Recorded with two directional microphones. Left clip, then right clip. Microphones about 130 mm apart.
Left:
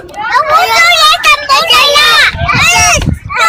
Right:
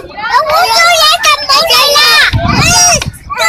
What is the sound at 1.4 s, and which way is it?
Speech, 15° left (ahead or behind).